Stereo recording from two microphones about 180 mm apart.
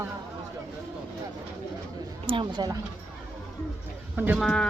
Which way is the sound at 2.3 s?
25° right (ahead or behind).